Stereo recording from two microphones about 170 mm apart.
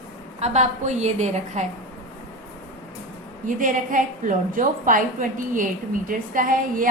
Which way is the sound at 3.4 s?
50° right (ahead or behind).